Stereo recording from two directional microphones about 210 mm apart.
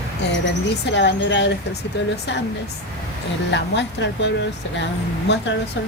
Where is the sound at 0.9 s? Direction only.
55° left (ahead or behind).